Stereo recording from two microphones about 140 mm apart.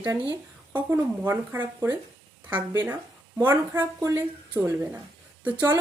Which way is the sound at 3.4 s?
15° right (ahead or behind).